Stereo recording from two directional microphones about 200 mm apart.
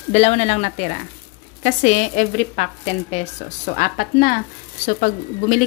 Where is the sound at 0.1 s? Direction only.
35° left (ahead or behind).